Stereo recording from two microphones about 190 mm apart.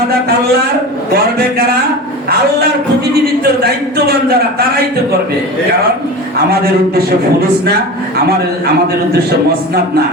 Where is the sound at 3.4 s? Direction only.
55° right (ahead or behind).